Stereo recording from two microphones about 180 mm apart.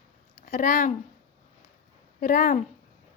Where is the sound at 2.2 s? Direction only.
50° left (ahead or behind).